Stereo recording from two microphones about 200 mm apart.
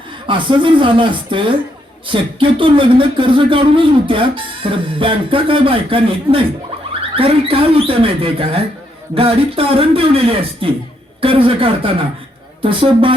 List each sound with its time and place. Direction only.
0.3 s speech: 25° right (ahead or behind)